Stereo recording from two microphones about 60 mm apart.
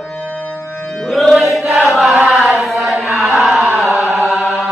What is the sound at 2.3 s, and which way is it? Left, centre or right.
Chant, centre.